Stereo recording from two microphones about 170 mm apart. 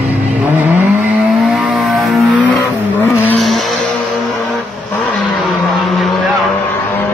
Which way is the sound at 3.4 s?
Centre (ahead or behind).